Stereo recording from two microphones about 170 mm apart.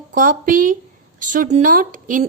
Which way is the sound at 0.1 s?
55° right (ahead or behind).